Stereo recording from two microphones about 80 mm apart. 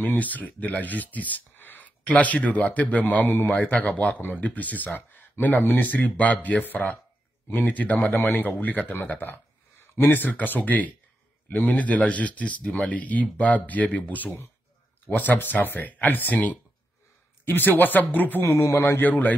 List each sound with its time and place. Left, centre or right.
0.0 s speech: left
18.4 s a man's voice: left
18.8 s speech: left